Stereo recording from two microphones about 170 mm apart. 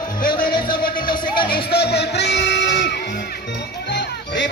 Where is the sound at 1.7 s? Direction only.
75° left (ahead or behind); by 4.5 s 90° left.